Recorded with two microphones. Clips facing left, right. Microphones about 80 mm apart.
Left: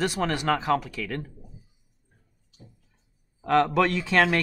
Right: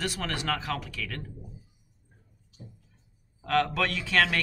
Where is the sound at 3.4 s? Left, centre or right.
Left.